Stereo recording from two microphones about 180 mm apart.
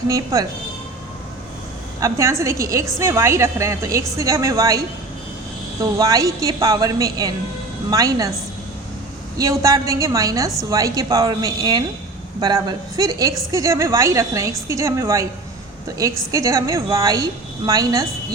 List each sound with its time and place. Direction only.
0.1 s a woman's voice: 20° right (ahead or behind)
2.0 s a woman's voice: 15° right (ahead or behind)
5.8 s a woman's voice: 20° right (ahead or behind)
9.4 s a woman's voice: 20° right (ahead or behind)